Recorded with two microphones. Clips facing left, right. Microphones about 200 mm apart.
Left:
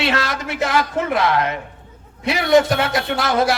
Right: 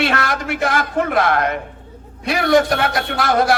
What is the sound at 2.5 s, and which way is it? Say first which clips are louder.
Speech: left 1 dB; 25° left (ahead or behind).